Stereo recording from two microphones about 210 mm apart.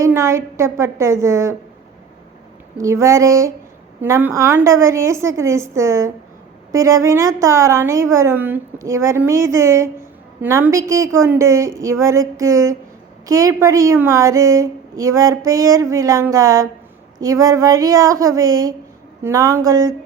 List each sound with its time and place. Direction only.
0.0 s a woman's voice: 15° right (ahead or behind)
2.8 s a woman's voice: 15° right (ahead or behind)